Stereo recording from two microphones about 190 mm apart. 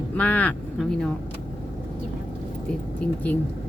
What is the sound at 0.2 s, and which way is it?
Speech, 5° left (ahead or behind).